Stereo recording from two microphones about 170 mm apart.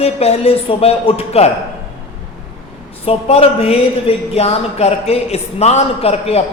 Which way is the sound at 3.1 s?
35° left (ahead or behind).